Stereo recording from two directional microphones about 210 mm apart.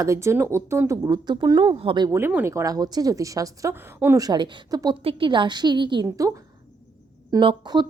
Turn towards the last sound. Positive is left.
turn(degrees=-20)  # may be behind; listen again after turning